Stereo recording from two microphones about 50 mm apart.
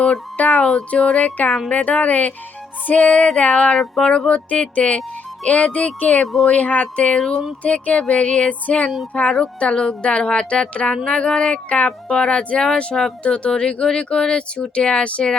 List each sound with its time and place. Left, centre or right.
0.3 s a woman's voice: left